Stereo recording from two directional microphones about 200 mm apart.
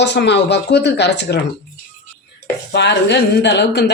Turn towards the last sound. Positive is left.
turn(degrees=60)  # may be behind; listen again after turning